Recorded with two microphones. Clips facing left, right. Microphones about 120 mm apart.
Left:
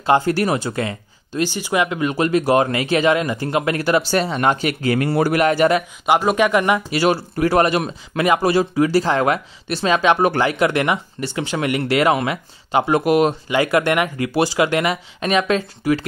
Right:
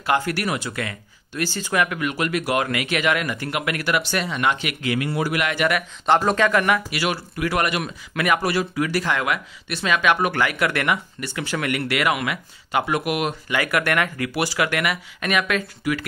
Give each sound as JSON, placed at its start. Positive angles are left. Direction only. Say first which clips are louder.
{"t": 0.0, "sound": "speech", "louder": "left 6 dB", "side_deg": 30}
{"t": 1.5, "sound": "speech", "louder": "even", "side_deg": 15}
{"t": 6.0, "sound": "speech", "louder": "left 1 dB", "side_deg": 10}
{"t": 6.9, "sound": "speech", "louder": "left 7 dB", "side_deg": 35}